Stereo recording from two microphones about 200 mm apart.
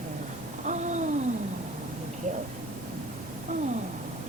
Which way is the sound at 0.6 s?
35° right (ahead or behind).